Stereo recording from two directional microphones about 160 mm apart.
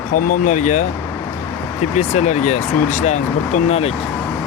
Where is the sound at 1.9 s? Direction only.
45° left (ahead or behind).